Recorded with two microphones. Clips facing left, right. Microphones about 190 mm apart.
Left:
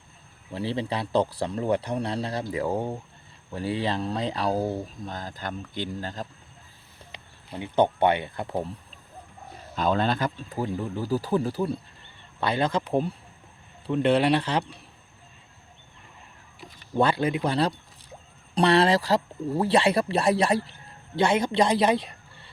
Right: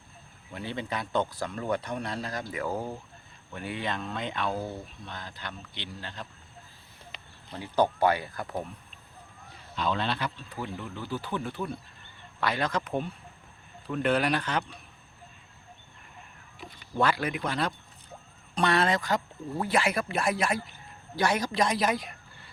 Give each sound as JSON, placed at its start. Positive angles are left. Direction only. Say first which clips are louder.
{"t": 0.5, "sound": "speech", "louder": "left 6 dB", "side_deg": 30}
{"t": 7.1, "sound": "speech", "louder": "left 3 dB", "side_deg": 20}
{"t": 9.7, "sound": "a man's voice", "louder": "left 5 dB", "side_deg": 45}
{"t": 16.9, "sound": "a man's voice", "louder": "left 4 dB", "side_deg": 30}